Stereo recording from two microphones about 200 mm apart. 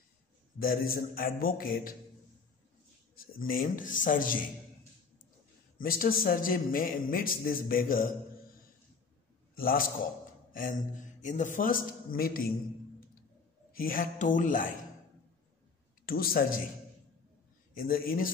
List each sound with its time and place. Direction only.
0.6 s a man's voice: 45° left (ahead or behind)
3.2 s a man's voice: 45° left (ahead or behind)
5.8 s a man's voice: 45° left (ahead or behind)
9.6 s a man's voice: 45° left (ahead or behind)
13.7 s speech: 45° left (ahead or behind)
16.1 s a man's voice: 45° left (ahead or behind)
17.7 s a man's voice: 45° left (ahead or behind)